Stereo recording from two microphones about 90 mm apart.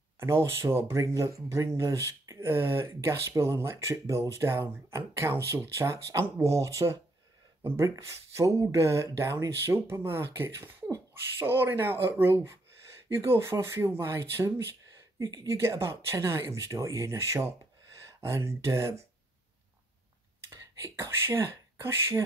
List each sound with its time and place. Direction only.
0.2 s speech: 30° right (ahead or behind)
20.3 s speech: 30° right (ahead or behind)